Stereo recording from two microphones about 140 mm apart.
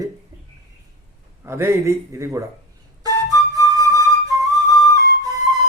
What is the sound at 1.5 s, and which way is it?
Speech, 20° right (ahead or behind).